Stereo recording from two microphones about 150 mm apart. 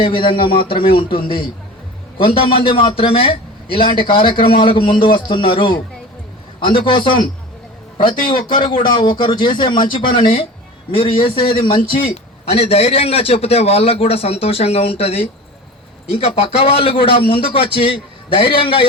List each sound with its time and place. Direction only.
0.0 s a man's voice: 35° left (ahead or behind)
8.3 s a man's voice: 30° left (ahead or behind)